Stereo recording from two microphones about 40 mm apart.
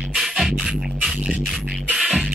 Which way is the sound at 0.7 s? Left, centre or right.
Centre.